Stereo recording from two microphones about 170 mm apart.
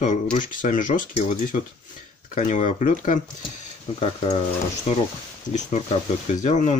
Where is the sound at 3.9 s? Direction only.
35° left (ahead or behind).